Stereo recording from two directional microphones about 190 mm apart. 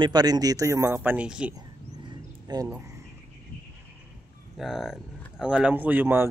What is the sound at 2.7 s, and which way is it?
Speech, 15° right (ahead or behind).